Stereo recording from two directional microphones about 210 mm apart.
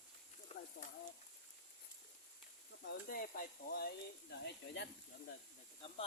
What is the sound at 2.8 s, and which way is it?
Speech, 40° left (ahead or behind).